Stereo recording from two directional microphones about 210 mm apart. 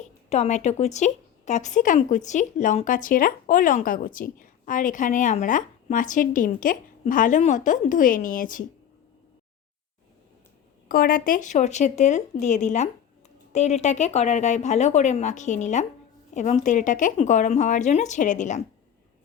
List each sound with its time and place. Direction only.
0.3 s speech: 35° left (ahead or behind)
10.8 s speech: 40° left (ahead or behind)